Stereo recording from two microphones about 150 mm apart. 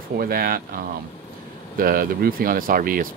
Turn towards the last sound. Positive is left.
turn(degrees=-70)  # may be behind; listen again after turning